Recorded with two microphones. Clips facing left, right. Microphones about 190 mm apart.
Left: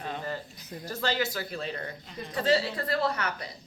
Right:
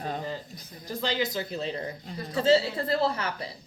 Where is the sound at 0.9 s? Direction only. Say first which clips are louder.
Right 1 dB; 15° right (ahead or behind).